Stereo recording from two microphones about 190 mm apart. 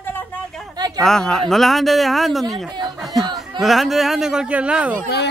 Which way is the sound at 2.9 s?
Centre (ahead or behind).